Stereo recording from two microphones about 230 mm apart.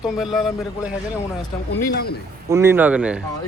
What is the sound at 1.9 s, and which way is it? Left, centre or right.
Speech, left.